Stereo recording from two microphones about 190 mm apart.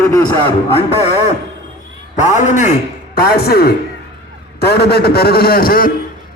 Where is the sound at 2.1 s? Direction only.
40° left (ahead or behind).